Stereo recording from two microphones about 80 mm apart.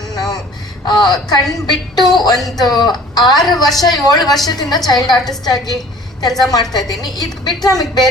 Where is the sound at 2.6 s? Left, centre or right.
Left.